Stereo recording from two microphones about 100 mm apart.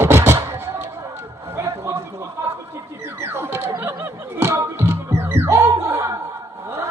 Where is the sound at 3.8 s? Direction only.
25° right (ahead or behind).